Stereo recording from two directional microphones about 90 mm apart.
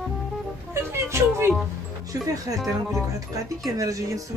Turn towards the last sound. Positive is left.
turn(degrees=-40)  # may be behind; listen again after turning